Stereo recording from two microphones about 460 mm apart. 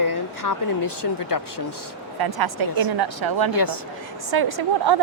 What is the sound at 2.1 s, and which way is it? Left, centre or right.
Speech, right.